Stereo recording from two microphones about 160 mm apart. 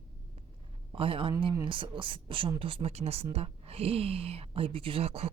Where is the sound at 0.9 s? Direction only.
35° right (ahead or behind).